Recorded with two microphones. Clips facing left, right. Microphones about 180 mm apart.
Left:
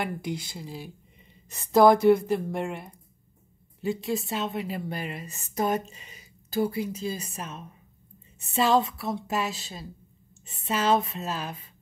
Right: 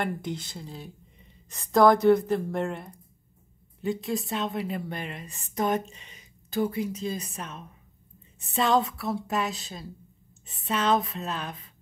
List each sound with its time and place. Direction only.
0.0 s a woman's voice: 10° left (ahead or behind)
2.5 s a woman's voice: 15° left (ahead or behind)
3.8 s speech: centre (ahead or behind)